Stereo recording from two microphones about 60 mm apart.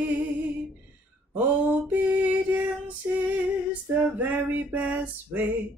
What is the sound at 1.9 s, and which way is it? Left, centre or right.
Mantra, right.